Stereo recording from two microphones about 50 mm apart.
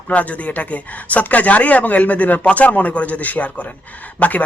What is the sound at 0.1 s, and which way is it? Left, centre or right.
Speech, left.